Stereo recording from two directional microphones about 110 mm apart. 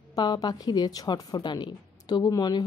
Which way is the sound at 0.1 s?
40° left (ahead or behind).